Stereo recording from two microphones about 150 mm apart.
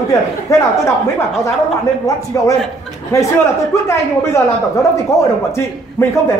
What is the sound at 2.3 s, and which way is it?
A man's voice, 20° left (ahead or behind).